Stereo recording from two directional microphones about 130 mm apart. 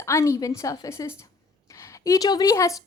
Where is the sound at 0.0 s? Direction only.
20° left (ahead or behind).